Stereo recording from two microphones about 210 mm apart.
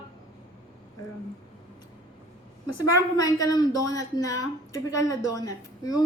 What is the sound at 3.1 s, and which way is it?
A woman's voice, 15° left (ahead or behind).